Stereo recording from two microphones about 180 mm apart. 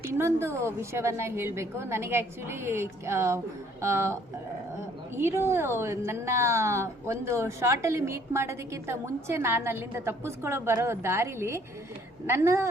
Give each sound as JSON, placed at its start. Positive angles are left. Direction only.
{"t": 0.1, "sound": "a woman's voice", "side_deg": -15}